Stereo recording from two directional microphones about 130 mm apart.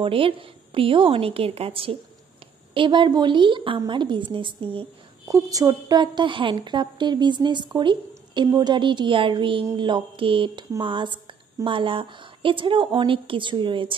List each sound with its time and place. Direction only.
0.0 s a woman's voice: 45° right (ahead or behind)
5.3 s a woman's voice: 25° right (ahead or behind)